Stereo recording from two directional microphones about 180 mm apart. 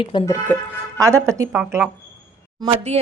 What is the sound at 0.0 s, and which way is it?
Speech, 25° left (ahead or behind).